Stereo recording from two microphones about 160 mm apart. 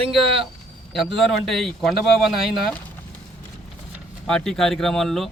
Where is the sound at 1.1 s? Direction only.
Centre (ahead or behind).